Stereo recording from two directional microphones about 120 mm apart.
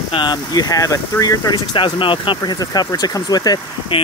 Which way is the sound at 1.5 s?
45° left (ahead or behind).